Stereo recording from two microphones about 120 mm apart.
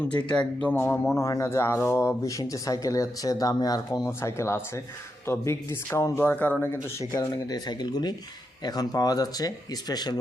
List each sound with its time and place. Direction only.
0.3 s speech: 10° left (ahead or behind)
1.1 s speech: 25° left (ahead or behind)
7.0 s speech: 30° left (ahead or behind)